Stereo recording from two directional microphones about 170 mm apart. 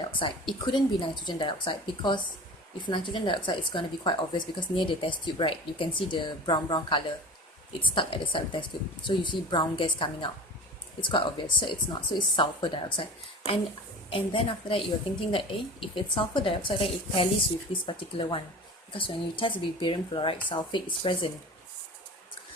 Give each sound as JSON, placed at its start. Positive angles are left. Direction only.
{"t": 0.0, "sound": "a woman's voice", "side_deg": 30}
{"t": 14.1, "sound": "a woman's voice", "side_deg": 30}